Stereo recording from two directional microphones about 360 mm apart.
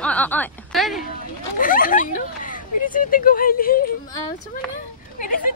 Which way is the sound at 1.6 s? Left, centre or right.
Left.